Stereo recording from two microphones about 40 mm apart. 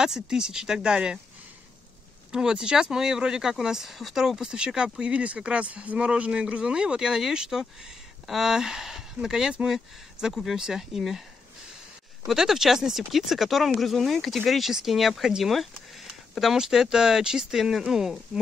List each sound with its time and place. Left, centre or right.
0.0 s speech: centre
2.3 s speech: right
10.2 s speech: centre
12.3 s speech: centre